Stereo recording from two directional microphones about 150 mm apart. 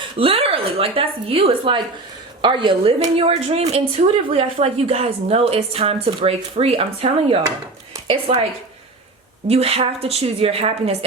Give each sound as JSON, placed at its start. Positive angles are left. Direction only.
{"t": 0.2, "sound": "speech", "side_deg": -40}
{"t": 3.0, "sound": "a woman's voice", "side_deg": -45}
{"t": 9.5, "sound": "speech", "side_deg": -40}